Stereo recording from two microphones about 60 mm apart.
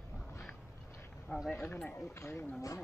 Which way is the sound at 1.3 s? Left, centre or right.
Left.